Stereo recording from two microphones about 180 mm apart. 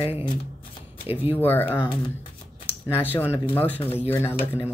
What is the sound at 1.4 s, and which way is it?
Speech, 10° left (ahead or behind).